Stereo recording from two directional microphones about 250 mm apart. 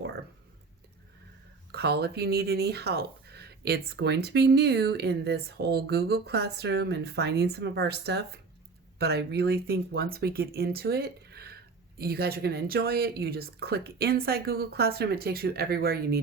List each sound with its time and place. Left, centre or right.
1.7 s speech: right